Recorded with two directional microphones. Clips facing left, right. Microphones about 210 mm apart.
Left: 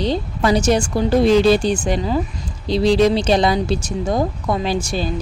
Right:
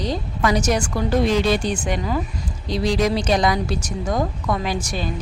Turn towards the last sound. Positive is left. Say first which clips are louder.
# left 4 dB
turn(degrees=30)  # may be behind; listen again after turning